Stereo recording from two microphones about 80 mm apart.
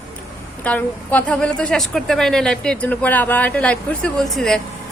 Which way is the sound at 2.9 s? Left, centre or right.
Left.